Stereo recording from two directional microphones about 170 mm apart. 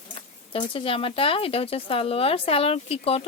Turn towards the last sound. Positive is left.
turn(degrees=35)  # may be behind; listen again after turning